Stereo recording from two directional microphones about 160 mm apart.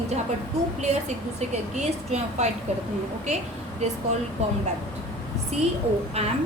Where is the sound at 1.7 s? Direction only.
45° right (ahead or behind).